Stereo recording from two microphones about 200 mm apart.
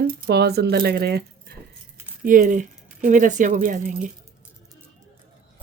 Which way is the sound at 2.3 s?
40° right (ahead or behind).